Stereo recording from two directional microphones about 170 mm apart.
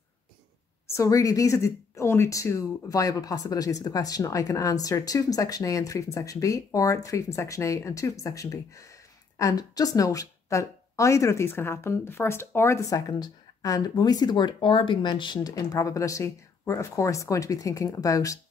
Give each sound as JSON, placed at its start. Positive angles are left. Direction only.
{"t": 0.9, "sound": "speech", "side_deg": 20}